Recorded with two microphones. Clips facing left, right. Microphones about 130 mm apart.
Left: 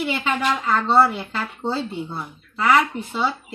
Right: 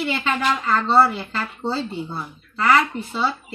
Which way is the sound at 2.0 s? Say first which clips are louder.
Even; 5° left (ahead or behind).